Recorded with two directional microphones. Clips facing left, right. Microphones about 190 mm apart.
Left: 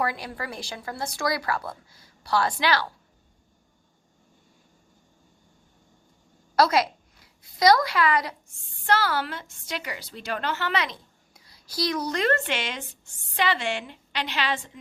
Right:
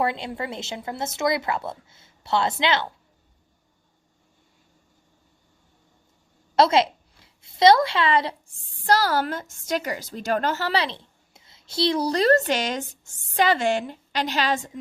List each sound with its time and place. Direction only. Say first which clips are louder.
0.0 s a woman's voice: right 3 dB; 25° right (ahead or behind)
6.6 s a woman's voice: right 3 dB; 25° right (ahead or behind); by 14.7 s 40° right (ahead or behind)